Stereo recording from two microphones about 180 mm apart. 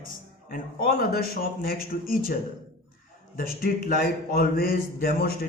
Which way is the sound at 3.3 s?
55° left (ahead or behind).